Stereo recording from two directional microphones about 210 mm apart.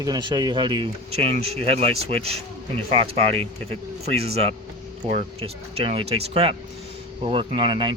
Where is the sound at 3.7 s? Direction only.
30° right (ahead or behind).